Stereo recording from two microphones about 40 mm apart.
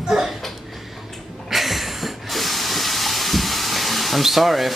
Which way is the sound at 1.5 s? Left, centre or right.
Centre.